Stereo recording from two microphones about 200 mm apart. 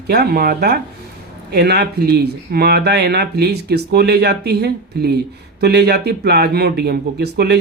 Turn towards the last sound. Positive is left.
turn(degrees=-55)  # may be behind; listen again after turning